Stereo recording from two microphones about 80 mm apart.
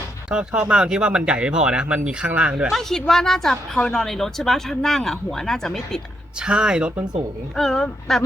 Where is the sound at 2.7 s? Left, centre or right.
Centre.